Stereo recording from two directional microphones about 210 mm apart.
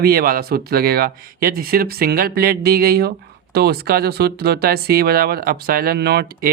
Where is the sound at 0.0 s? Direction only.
45° right (ahead or behind).